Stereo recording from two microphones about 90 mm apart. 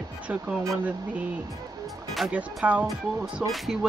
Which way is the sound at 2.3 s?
15° right (ahead or behind).